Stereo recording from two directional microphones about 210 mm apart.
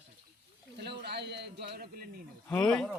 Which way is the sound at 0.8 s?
50° right (ahead or behind).